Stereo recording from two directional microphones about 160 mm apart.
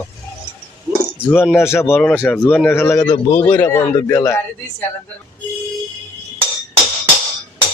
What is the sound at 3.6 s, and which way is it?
A man's voice, 20° left (ahead or behind).